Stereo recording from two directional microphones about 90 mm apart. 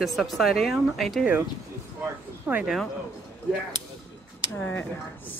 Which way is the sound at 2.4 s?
15° right (ahead or behind).